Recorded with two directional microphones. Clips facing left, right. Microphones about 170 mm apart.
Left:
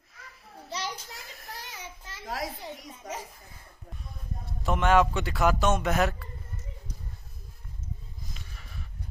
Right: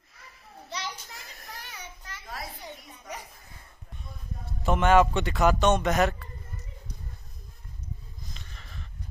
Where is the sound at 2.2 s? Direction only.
90° left.